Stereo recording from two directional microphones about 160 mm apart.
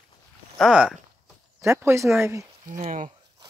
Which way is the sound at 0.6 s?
5° right (ahead or behind).